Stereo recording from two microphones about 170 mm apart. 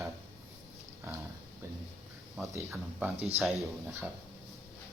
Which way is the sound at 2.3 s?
15° right (ahead or behind).